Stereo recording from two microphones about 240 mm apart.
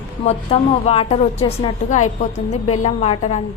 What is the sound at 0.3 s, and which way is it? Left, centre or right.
A woman's voice, left.